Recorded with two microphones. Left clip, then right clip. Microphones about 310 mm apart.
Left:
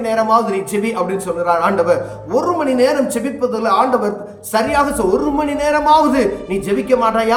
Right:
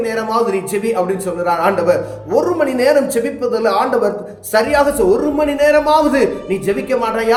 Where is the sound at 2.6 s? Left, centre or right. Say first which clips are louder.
Right 2 dB; centre.